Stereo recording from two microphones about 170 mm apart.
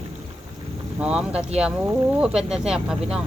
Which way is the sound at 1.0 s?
5° right (ahead or behind).